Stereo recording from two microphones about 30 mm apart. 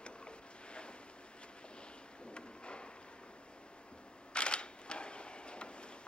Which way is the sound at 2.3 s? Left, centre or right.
Left.